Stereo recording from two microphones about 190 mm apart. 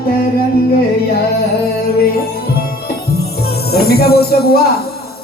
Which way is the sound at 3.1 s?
55° left (ahead or behind).